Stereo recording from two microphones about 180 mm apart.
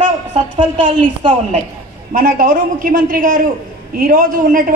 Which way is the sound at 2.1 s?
50° right (ahead or behind).